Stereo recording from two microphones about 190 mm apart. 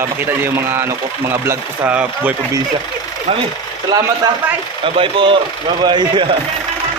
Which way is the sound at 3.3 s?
35° right (ahead or behind).